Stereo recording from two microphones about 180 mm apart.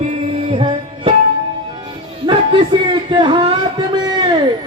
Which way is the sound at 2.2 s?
25° right (ahead or behind).